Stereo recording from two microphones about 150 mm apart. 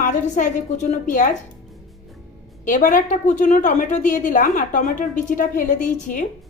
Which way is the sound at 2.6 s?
60° left (ahead or behind).